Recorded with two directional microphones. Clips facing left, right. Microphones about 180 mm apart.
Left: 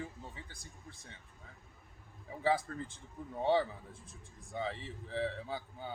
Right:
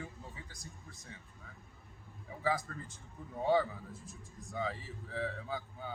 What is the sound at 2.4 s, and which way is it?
A man's voice, 30° left (ahead or behind).